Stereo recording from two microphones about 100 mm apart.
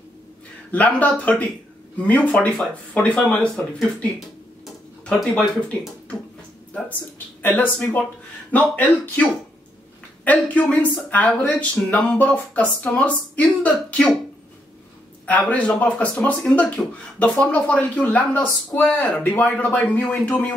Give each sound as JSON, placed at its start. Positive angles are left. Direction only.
{"t": 0.7, "sound": "speech", "side_deg": 15}
{"t": 5.5, "sound": "speech", "side_deg": 10}
{"t": 7.4, "sound": "speech", "side_deg": 20}
{"t": 15.2, "sound": "speech", "side_deg": 15}